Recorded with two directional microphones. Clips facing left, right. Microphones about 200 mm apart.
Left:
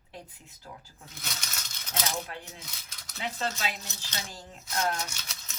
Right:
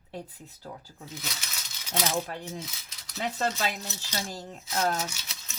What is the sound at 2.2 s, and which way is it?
Speech, 40° right (ahead or behind).